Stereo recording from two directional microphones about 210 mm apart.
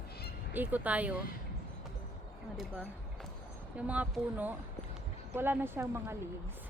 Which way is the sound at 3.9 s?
10° right (ahead or behind).